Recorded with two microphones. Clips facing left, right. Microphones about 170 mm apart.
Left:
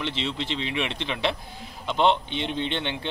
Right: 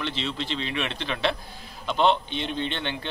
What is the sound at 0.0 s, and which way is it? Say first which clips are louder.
A man's voice: left 1 dB; 20° left (ahead or behind).